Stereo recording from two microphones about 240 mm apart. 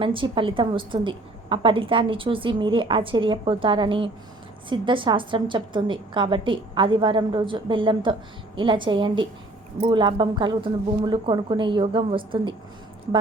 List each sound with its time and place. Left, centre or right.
0.0 s a woman's voice: right